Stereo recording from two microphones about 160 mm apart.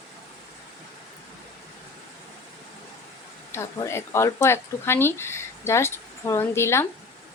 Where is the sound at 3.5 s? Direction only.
15° left (ahead or behind).